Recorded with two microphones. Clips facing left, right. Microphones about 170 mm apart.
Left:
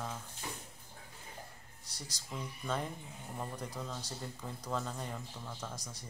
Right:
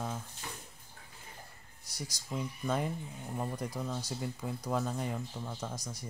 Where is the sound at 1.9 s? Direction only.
10° right (ahead or behind).